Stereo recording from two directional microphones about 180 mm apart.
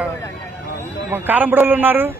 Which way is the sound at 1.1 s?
10° right (ahead or behind).